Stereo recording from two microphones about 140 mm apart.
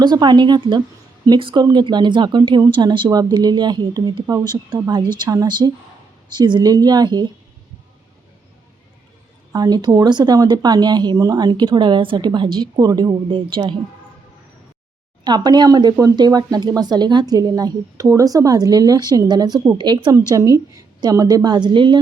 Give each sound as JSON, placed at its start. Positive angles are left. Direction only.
{"t": 0.0, "sound": "speech", "side_deg": -30}
{"t": 9.5, "sound": "speech", "side_deg": -30}
{"t": 15.2, "sound": "speech", "side_deg": -30}